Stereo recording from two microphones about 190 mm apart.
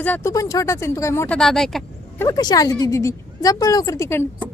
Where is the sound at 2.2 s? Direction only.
20° left (ahead or behind).